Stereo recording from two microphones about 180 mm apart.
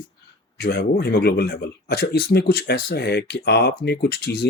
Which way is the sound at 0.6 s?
60° left (ahead or behind).